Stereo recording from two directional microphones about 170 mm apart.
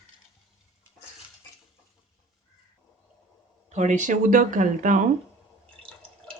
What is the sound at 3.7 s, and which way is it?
Speech, 45° right (ahead or behind).